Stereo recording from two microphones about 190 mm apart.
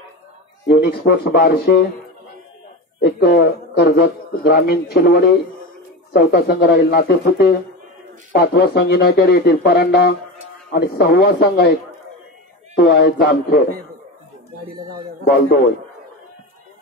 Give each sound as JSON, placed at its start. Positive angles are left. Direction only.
{"t": 0.7, "sound": "speech", "side_deg": 55}
{"t": 3.0, "sound": "a man's voice", "side_deg": 60}
{"t": 12.7, "sound": "speech", "side_deg": 60}